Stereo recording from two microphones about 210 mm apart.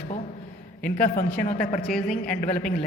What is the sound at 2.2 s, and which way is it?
Speech, 40° left (ahead or behind).